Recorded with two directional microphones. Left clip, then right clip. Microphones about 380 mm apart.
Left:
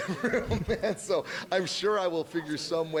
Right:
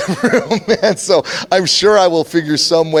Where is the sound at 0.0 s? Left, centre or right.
Right.